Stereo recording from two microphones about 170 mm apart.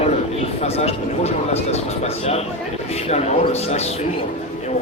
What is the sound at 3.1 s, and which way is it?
Speech, 40° left (ahead or behind).